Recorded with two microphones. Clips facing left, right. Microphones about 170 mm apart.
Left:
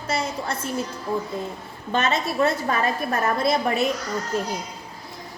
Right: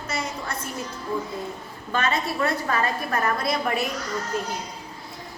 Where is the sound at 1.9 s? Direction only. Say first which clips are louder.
Left 2 dB; 25° left (ahead or behind).